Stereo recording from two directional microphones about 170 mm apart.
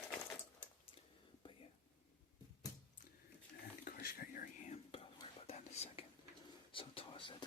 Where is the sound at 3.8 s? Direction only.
60° left (ahead or behind); by 6.0 s 35° left (ahead or behind).